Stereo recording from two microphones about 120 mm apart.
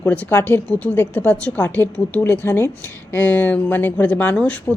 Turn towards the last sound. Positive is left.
turn(degrees=10)  # may be behind; listen again after turning